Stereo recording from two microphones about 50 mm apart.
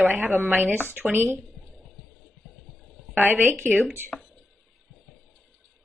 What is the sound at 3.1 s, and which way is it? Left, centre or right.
Speech, right.